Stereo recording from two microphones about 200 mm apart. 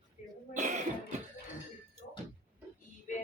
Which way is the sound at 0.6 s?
40° right (ahead or behind).